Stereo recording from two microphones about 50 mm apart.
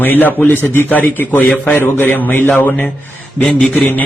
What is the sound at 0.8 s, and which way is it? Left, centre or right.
Speech, left.